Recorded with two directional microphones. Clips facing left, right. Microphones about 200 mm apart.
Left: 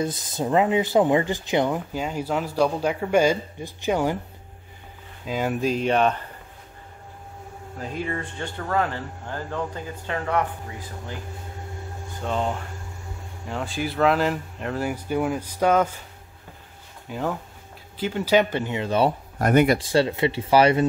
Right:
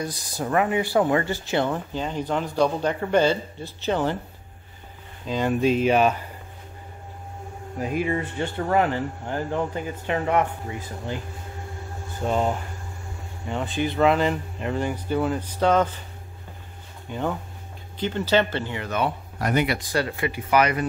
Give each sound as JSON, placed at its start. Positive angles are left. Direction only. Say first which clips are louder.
{"t": 0.0, "sound": "speech", "louder": "left 3 dB", "side_deg": 20}
{"t": 5.2, "sound": "speech", "louder": "right 2 dB", "side_deg": 5}
{"t": 7.8, "sound": "speech", "louder": "right 5 dB", "side_deg": -15}
{"t": 12.2, "sound": "speech", "louder": "right 3 dB", "side_deg": -10}
{"t": 17.1, "sound": "speech", "louder": "even", "side_deg": 0}
{"t": 19.3, "sound": "speech", "louder": "left 6 dB", "side_deg": 50}
{"t": 19.8, "sound": "speech", "louder": "left 5 dB", "side_deg": 25}